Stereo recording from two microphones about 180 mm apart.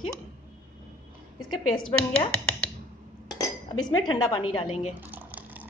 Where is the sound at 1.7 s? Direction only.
5° left (ahead or behind).